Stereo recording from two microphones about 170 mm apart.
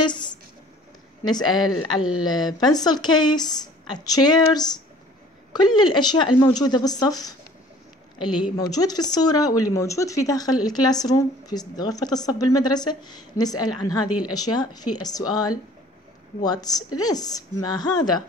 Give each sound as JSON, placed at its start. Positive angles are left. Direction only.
{"t": 0.0, "sound": "a sound", "side_deg": 25}
{"t": 1.5, "sound": "a woman's voice", "side_deg": 0}
{"t": 2.2, "sound": "a woman's voice", "side_deg": 25}
{"t": 16.4, "sound": "a woman's voice", "side_deg": 25}